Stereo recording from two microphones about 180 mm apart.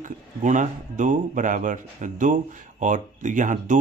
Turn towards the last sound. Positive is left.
turn(degrees=-45)  # may be behind; listen again after turning